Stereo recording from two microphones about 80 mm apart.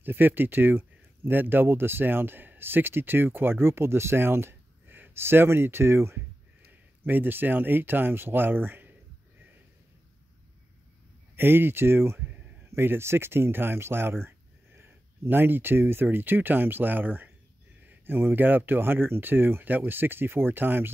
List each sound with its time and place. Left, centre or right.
0.0 s speech: right
11.3 s speech: right